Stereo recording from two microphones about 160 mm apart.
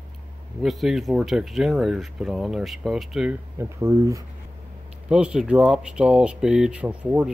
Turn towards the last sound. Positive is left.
turn(degrees=-5)  # may be behind; listen again after turning